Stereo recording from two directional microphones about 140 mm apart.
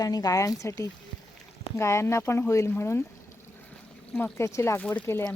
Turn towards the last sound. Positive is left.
turn(degrees=15)  # may be behind; listen again after turning